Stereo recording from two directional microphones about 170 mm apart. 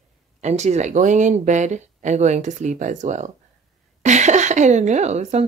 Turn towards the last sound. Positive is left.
turn(degrees=-40)  # may be behind; listen again after turning